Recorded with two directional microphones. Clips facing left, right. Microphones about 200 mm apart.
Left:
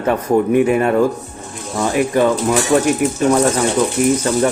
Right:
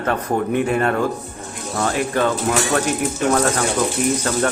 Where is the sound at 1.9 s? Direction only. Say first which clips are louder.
Left 7 dB; 10° left (ahead or behind).